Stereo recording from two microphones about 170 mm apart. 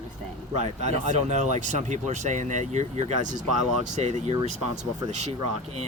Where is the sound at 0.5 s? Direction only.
40° right (ahead or behind).